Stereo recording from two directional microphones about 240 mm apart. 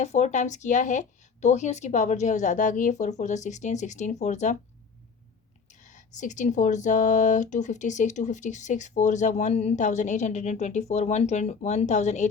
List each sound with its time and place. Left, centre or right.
0.0 s speech: left
6.1 s speech: left